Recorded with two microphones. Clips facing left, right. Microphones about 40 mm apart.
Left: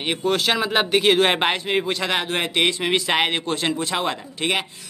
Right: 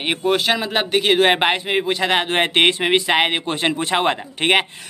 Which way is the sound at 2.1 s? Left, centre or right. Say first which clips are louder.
Right 6 dB; right.